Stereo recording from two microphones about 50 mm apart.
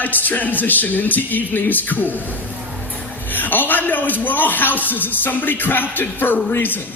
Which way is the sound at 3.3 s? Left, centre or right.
Left.